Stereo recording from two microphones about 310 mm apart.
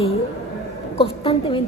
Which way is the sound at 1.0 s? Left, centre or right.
Centre.